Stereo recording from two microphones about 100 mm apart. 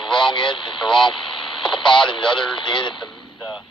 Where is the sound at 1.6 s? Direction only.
55° left (ahead or behind).